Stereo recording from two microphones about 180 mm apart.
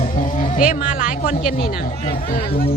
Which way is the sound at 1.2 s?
50° left (ahead or behind).